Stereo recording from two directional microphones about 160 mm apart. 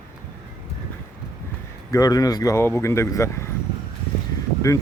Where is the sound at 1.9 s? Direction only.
20° left (ahead or behind).